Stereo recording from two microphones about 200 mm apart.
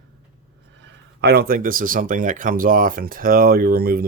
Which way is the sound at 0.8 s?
55° right (ahead or behind).